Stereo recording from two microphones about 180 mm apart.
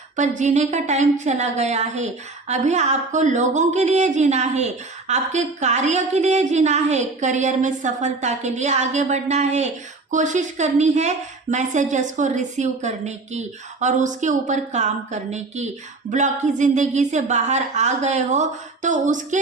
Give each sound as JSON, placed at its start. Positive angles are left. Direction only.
{"t": 0.2, "sound": "speech", "side_deg": -40}